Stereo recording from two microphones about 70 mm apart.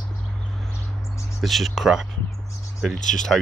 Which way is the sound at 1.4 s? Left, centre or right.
Centre.